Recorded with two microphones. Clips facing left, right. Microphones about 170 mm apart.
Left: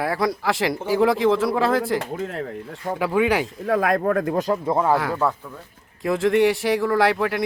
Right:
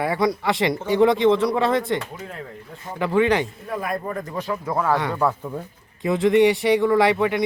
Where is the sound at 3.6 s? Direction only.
90° left; by 4.4 s 65° left (ahead or behind).